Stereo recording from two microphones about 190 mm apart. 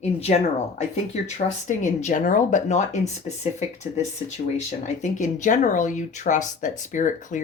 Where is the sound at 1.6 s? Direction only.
40° left (ahead or behind).